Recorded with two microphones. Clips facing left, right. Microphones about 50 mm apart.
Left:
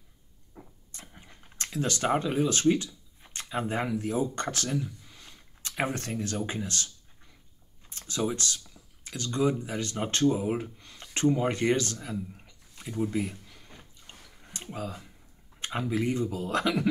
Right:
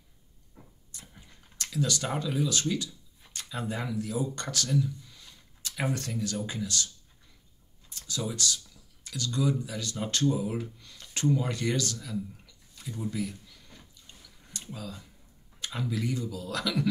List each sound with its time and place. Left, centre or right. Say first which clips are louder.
0.6 s vehicle: left 5 dB; left
0.9 s a sound: left 3 dB; left
2.7 s speech: left 5 dB; left
7.9 s speech: left 4 dB; left
10.3 s a sound: left 3 dB; left
15.6 s speech: left 4 dB; left